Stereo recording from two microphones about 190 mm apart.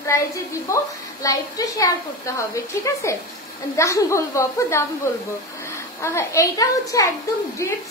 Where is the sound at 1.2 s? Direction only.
20° left (ahead or behind).